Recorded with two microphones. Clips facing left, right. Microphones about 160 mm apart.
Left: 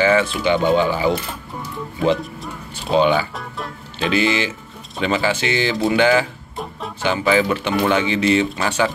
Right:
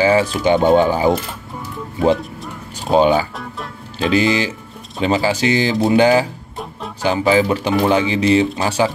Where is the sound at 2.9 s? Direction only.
40° right (ahead or behind).